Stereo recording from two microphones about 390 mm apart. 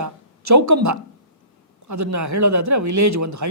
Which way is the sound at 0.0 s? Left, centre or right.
Right.